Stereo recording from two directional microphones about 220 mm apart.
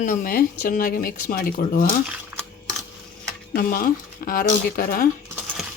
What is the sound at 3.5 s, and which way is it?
Speech, 40° left (ahead or behind).